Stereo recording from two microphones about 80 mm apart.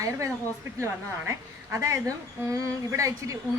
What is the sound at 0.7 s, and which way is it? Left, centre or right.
A woman's voice, right.